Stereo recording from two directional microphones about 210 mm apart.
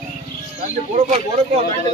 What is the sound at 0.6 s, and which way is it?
Speech, 35° right (ahead or behind).